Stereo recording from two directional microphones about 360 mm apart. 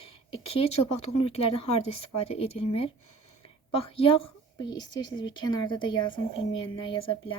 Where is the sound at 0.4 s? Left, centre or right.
Centre.